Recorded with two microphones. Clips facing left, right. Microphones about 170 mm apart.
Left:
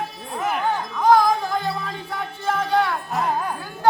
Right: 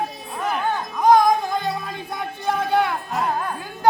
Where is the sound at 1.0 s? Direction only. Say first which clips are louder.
Right 2 dB; 20° right (ahead or behind).